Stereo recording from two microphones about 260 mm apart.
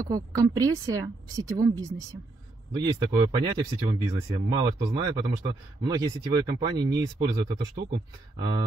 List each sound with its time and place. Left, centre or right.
0.0 s speech: centre
7.6 s speech: right
8.4 s speech: centre